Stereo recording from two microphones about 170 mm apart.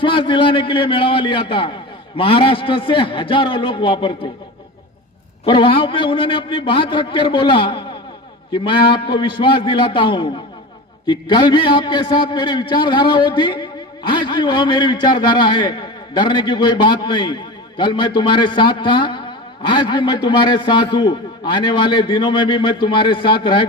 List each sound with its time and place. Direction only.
0.0 s a man's voice: 30° left (ahead or behind)
5.4 s a man's voice: 30° left (ahead or behind)